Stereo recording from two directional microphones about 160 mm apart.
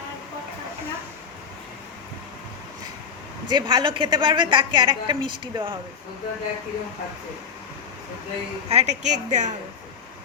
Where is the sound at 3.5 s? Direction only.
30° right (ahead or behind).